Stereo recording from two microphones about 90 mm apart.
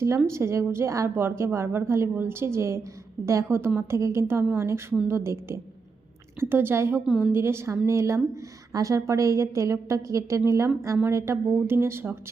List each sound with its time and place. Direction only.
0.3 s a woman's voice: 30° right (ahead or behind)